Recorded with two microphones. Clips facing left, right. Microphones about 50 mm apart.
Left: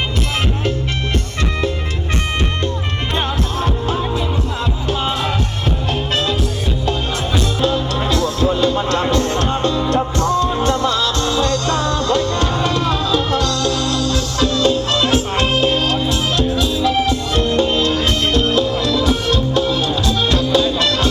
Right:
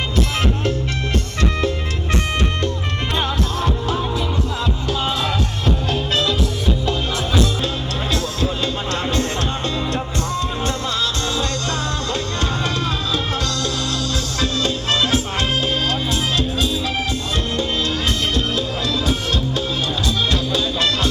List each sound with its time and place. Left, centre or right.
7.6 s music: left
14.1 s music: right
15.0 s music: left